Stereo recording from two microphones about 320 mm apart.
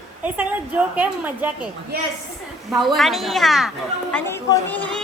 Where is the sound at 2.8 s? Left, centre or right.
Centre.